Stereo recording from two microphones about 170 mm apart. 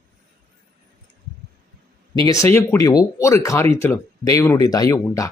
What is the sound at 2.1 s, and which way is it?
Speech, 20° left (ahead or behind).